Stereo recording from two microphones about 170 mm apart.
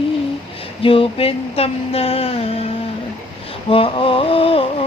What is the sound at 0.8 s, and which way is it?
Mantra, 30° left (ahead or behind).